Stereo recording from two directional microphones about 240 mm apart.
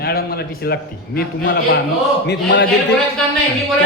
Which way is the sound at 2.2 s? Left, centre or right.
Left.